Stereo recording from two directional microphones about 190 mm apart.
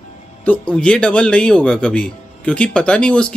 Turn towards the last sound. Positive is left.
turn(degrees=5)  # may be behind; listen again after turning